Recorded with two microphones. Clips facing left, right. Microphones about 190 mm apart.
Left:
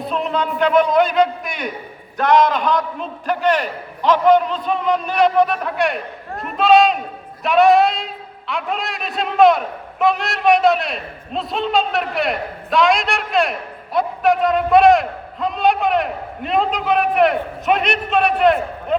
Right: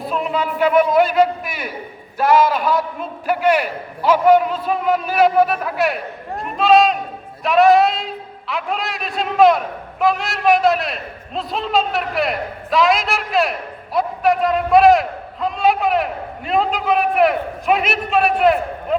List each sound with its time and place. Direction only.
0.0 s a man's voice: 5° right (ahead or behind)